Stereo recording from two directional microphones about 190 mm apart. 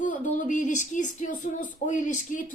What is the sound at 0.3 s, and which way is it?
Speech, 40° left (ahead or behind).